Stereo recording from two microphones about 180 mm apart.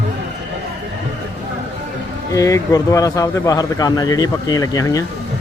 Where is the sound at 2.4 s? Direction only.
20° left (ahead or behind).